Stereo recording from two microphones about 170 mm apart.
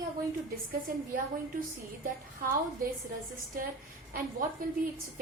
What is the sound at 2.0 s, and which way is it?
Speech, 55° right (ahead or behind).